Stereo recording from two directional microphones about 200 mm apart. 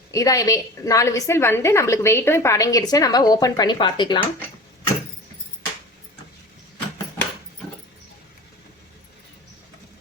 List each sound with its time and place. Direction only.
0.1 s a woman's voice: 15° left (ahead or behind)